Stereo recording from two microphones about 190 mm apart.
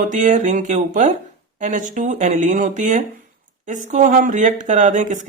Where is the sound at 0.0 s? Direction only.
40° right (ahead or behind).